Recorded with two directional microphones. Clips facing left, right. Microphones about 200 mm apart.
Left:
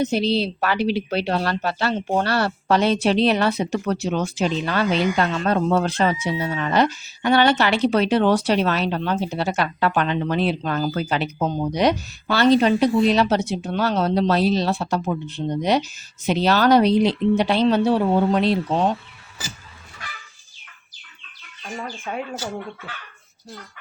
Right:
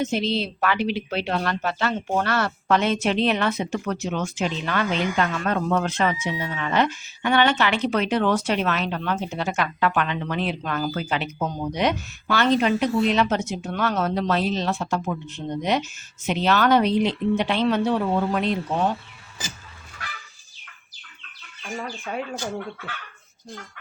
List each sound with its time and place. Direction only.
0.0 s speech: 35° left (ahead or behind)